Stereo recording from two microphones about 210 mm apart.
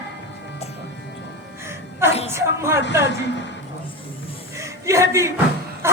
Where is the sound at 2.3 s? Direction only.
10° right (ahead or behind).